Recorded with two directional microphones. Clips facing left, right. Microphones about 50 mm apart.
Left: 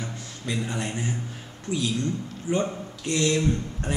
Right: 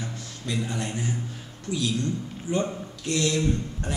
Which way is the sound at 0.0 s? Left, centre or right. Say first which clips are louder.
Left 1 dB; centre.